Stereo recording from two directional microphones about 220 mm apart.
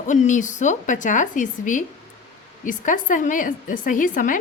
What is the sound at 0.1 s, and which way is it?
A woman's voice, 35° left (ahead or behind).